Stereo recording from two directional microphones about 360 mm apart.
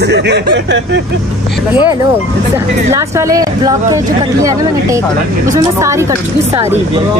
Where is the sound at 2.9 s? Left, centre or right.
Centre.